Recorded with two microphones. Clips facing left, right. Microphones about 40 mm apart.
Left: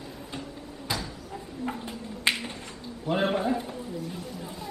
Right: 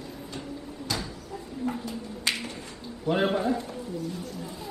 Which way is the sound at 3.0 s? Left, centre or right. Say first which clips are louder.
Right 1 dB; centre.